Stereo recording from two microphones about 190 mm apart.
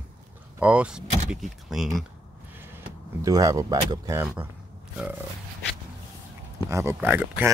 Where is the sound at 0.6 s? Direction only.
5° right (ahead or behind).